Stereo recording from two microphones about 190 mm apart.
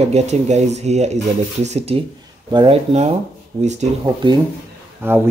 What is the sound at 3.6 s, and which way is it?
Speech, 35° right (ahead or behind).